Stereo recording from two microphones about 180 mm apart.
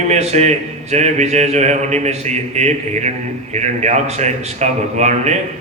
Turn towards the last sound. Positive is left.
turn(degrees=-40)  # may be behind; listen again after turning